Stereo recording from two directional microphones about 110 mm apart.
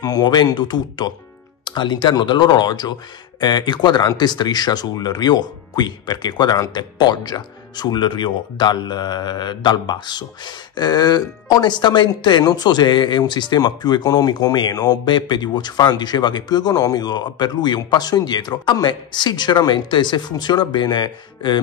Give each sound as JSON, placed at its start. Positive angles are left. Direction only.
{"t": 0.0, "sound": "speech", "side_deg": 40}